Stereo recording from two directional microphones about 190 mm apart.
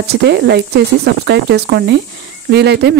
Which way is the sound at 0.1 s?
60° right (ahead or behind).